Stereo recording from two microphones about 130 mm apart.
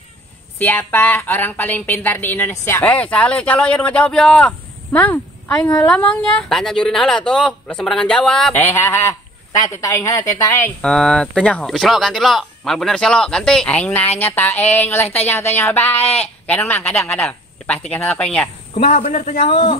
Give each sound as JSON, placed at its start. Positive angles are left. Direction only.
{"t": 0.6, "sound": "speech", "side_deg": 15}
{"t": 8.5, "sound": "speech", "side_deg": 20}
{"t": 10.8, "sound": "speech", "side_deg": 5}
{"t": 18.9, "sound": "speech", "side_deg": 65}
{"t": 19.5, "sound": "speech", "side_deg": 45}